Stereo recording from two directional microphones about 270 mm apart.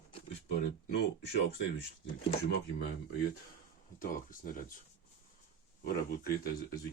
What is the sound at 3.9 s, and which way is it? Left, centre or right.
Speech, left.